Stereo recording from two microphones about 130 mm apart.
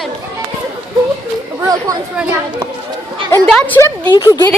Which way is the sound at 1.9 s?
25° right (ahead or behind).